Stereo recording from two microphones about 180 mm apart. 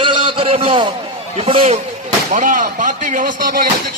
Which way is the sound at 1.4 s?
30° right (ahead or behind).